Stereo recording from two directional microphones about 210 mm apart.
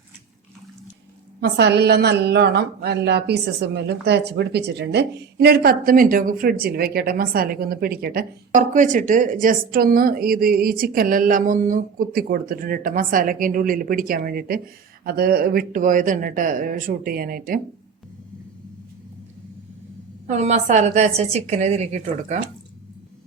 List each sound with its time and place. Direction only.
1.4 s speech: 55° right (ahead or behind)
20.2 s speech: 30° right (ahead or behind)